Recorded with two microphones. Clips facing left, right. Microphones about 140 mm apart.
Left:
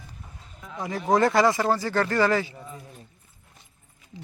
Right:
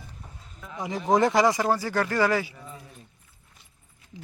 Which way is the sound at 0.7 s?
15° right (ahead or behind).